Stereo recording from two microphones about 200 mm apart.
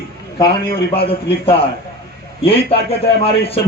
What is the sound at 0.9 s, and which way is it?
A man's voice, 30° left (ahead or behind).